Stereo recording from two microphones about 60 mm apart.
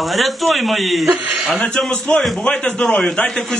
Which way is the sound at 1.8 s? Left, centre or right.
Centre.